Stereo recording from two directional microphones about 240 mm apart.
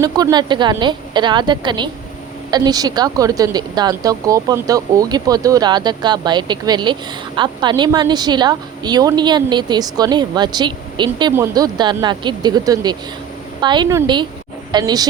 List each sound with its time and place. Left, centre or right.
0.0 s a woman's voice: centre